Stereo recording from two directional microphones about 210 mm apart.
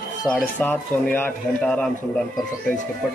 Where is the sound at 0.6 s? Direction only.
10° left (ahead or behind).